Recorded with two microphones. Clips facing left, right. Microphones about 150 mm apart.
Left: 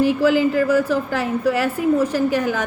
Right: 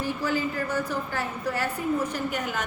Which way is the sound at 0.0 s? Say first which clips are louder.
Left 11 dB; 90° left.